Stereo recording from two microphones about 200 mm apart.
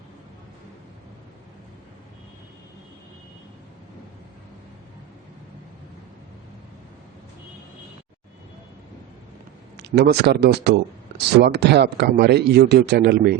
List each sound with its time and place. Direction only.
9.7 s speech: 55° right (ahead or behind)